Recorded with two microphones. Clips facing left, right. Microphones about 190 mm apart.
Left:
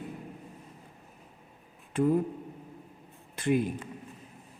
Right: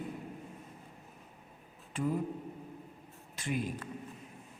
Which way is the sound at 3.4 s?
60° left (ahead or behind).